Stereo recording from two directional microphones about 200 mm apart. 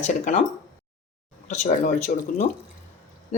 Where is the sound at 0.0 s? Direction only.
40° left (ahead or behind).